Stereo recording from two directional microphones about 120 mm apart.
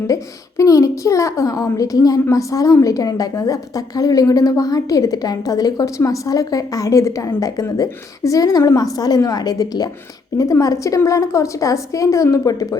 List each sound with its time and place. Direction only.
0.1 s a woman's voice: 25° left (ahead or behind)